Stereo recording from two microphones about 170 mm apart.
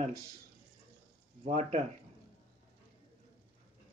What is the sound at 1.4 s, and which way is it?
Speech, 40° right (ahead or behind).